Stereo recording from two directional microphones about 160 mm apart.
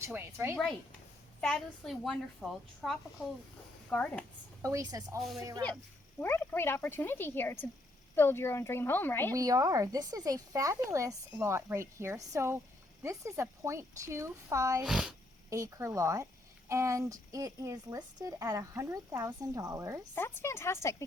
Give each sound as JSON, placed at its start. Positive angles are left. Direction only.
{"t": 0.0, "sound": "a woman's voice", "side_deg": -15}
{"t": 1.4, "sound": "a woman's voice", "side_deg": 5}
{"t": 4.6, "sound": "speech", "side_deg": -20}
{"t": 6.1, "sound": "speech", "side_deg": 10}
{"t": 9.3, "sound": "a woman's voice", "side_deg": -20}
{"t": 14.8, "sound": "a woman's voice", "side_deg": -5}
{"t": 15.4, "sound": "speech", "side_deg": -20}
{"t": 20.1, "sound": "speech", "side_deg": 15}